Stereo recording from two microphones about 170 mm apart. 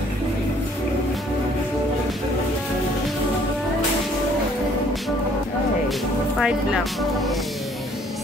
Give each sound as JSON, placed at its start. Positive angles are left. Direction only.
{"t": 6.4, "sound": "speech", "side_deg": 0}